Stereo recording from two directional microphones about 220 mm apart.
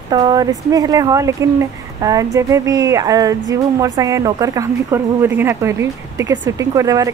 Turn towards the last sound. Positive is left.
turn(degrees=-15)  # may be behind; listen again after turning